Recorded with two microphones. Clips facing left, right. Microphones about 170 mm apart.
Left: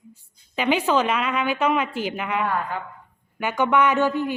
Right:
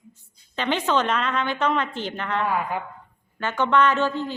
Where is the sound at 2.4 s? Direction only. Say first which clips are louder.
Right 1 dB; 10° right (ahead or behind).